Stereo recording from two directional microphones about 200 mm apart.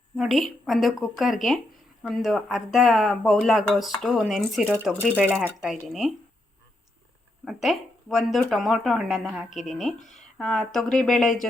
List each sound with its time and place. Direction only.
0.2 s speech: centre (ahead or behind)
7.4 s speech: centre (ahead or behind)
10.0 s speech: 40° left (ahead or behind)
10.3 s speech: 5° left (ahead or behind)